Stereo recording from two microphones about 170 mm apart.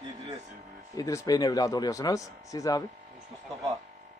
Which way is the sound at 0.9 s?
20° left (ahead or behind).